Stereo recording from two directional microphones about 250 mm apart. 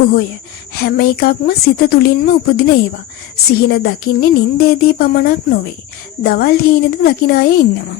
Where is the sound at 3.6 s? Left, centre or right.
Left.